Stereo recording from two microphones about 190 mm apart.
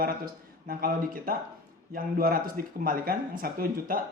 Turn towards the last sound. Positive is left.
turn(degrees=-50)  # may be behind; listen again after turning